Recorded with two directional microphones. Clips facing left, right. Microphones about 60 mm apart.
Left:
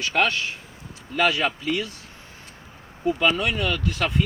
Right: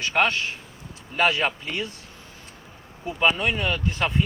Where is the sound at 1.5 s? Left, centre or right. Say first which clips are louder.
Left 3 dB; right.